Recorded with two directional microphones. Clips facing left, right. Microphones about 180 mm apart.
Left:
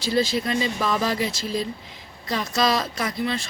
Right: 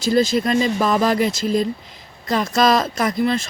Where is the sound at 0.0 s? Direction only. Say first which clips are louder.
Right 6 dB; 45° right (ahead or behind).